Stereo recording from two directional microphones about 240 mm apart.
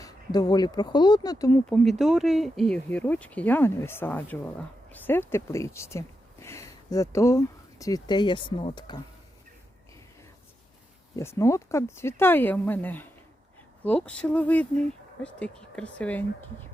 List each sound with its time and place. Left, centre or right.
0.0 s speech: centre
1.7 s speech: centre
11.2 s speech: centre